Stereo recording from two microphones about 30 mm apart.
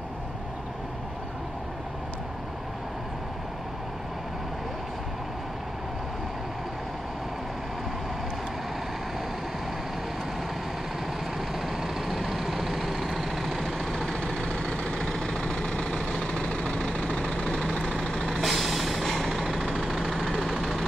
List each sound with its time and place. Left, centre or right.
11.6 s vehicle: centre; by 15.0 s left
15.0 s vehicle: centre
15.3 s vehicle: left
16.3 s vehicle: left
18.4 s music: centre
19.2 s vehicle: centre